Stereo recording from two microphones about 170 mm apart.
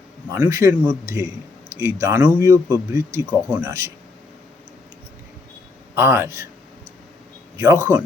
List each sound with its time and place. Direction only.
0.3 s speech: 20° right (ahead or behind)
5.9 s speech: 15° right (ahead or behind)
7.5 s speech: 20° right (ahead or behind)